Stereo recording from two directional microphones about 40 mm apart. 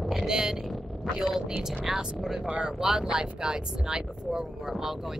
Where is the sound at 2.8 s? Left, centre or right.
Centre.